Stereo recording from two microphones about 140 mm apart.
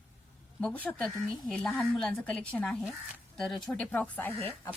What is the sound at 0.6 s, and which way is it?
A woman's voice, 10° left (ahead or behind).